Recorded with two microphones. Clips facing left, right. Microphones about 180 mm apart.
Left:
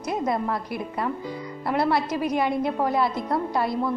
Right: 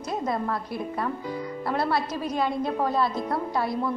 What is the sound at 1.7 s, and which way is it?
A woman's voice, 10° left (ahead or behind).